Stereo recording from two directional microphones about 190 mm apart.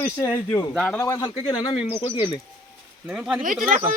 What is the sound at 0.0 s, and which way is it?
Speech, 15° left (ahead or behind).